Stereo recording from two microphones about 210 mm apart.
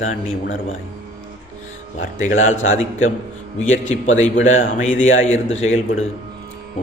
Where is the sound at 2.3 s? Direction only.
70° left (ahead or behind).